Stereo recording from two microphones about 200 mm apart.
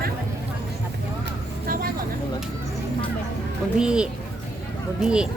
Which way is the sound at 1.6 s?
45° right (ahead or behind).